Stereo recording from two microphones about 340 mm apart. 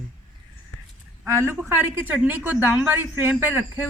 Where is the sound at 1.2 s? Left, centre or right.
Centre.